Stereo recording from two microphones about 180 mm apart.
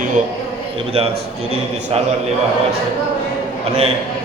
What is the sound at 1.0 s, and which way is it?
A man's voice, 30° right (ahead or behind).